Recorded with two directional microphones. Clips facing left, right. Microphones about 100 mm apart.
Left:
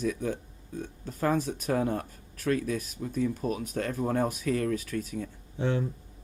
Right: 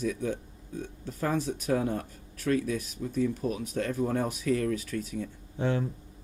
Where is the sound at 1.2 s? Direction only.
50° left (ahead or behind).